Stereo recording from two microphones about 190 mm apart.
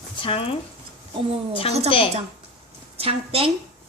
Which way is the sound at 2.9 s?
30° right (ahead or behind).